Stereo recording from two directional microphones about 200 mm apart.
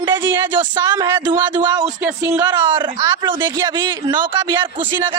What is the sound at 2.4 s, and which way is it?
Speech, 20° right (ahead or behind).